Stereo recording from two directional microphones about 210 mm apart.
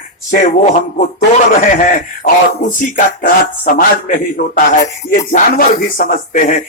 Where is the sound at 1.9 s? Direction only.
40° left (ahead or behind).